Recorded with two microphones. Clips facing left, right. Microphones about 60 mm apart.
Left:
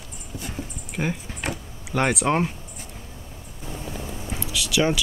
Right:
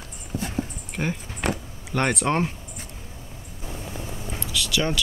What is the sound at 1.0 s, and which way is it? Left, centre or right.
Speech, centre.